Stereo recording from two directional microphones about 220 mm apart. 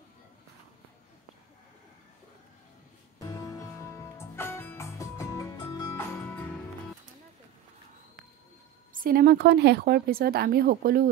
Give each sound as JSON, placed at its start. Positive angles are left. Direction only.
{"t": 3.2, "sound": "music", "side_deg": 15}
{"t": 8.9, "sound": "speech", "side_deg": -40}